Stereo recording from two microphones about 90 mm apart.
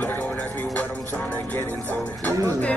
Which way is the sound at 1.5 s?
20° left (ahead or behind).